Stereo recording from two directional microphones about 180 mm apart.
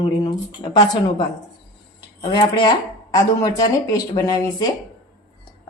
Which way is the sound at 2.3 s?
25° left (ahead or behind).